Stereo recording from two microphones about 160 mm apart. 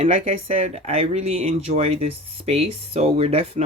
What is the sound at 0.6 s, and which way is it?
Speech, 40° right (ahead or behind).